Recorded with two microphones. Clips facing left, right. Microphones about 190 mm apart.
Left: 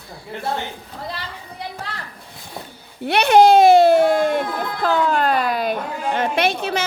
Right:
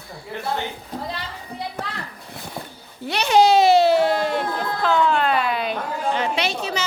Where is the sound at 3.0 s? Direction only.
60° left (ahead or behind).